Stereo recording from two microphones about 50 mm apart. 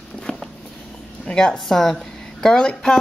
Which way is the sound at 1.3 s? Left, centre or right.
Centre.